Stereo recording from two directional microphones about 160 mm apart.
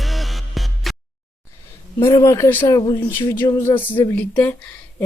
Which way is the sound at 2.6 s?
30° left (ahead or behind).